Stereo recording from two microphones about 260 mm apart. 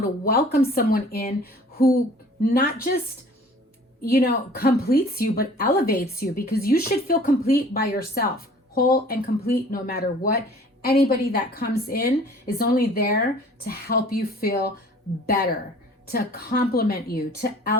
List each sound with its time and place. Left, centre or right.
0.3 s a woman's voice: left
4.1 s a woman's voice: left
16.1 s a woman's voice: left